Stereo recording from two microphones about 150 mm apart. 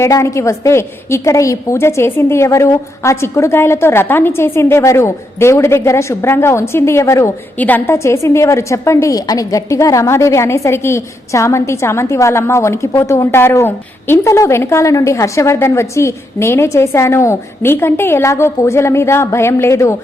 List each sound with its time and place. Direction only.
0.0 s a woman's voice: 20° left (ahead or behind)